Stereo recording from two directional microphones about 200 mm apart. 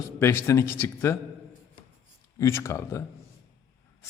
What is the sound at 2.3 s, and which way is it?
Speech, 15° left (ahead or behind).